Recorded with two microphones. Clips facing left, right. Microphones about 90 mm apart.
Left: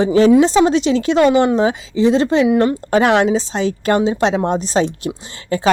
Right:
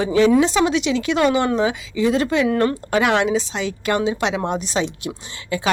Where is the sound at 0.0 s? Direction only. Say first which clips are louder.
Left 4 dB; 35° left (ahead or behind).